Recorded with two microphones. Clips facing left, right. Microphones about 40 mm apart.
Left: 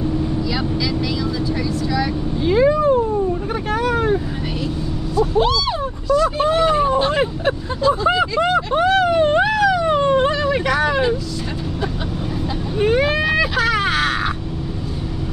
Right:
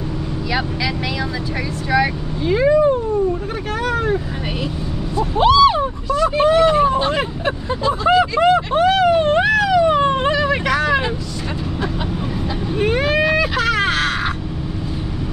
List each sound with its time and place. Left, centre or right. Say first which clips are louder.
2.4 s speech: right 1 dB; centre
5.1 s speech: right 3 dB; right
6.8 s vehicle: even; centre
8.1 s speech: right 3 dB; centre
10.5 s vehicle: right 1 dB; right
13.0 s vehicle: right 1 dB; centre